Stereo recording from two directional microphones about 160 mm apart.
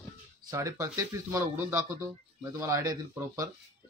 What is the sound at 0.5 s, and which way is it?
Speech, 20° right (ahead or behind).